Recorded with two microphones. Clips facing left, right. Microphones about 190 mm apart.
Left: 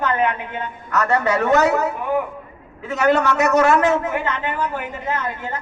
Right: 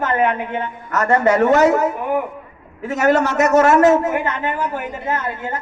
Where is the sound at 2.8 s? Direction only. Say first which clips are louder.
Right 1 dB; 45° right (ahead or behind).